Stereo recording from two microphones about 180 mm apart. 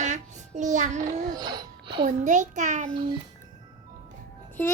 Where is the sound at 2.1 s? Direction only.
45° right (ahead or behind).